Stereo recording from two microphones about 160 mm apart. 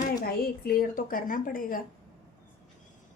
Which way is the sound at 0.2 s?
70° left (ahead or behind).